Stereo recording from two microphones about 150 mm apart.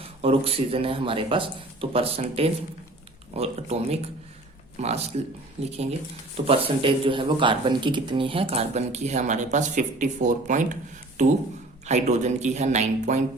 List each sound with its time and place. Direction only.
0.2 s a man's voice: 40° right (ahead or behind); by 10.8 s 55° right (ahead or behind)
11.9 s speech: 50° right (ahead or behind)